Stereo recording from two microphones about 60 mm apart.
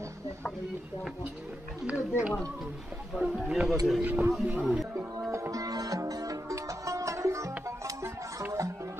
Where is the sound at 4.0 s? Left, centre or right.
Right.